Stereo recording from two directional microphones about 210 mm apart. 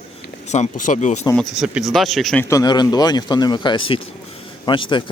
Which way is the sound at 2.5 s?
20° left (ahead or behind).